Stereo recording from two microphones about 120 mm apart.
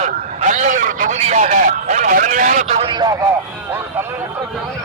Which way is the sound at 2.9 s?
35° right (ahead or behind).